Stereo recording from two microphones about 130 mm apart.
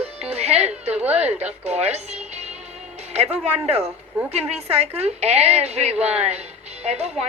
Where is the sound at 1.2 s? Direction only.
55° right (ahead or behind).